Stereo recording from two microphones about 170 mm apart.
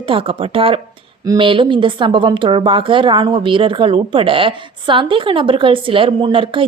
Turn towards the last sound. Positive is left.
turn(degrees=-30)  # may be behind; listen again after turning